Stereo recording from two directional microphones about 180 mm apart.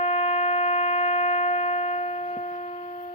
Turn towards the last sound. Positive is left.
turn(degrees=40)  # may be behind; listen again after turning